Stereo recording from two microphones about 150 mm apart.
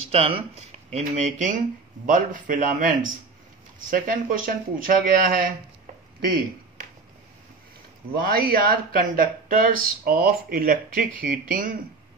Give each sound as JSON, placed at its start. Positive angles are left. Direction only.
{"t": 0.1, "sound": "speech", "side_deg": -40}
{"t": 8.2, "sound": "speech", "side_deg": -75}